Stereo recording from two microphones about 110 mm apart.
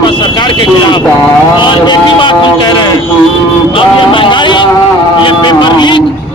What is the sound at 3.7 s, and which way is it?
A man's voice, 55° left (ahead or behind).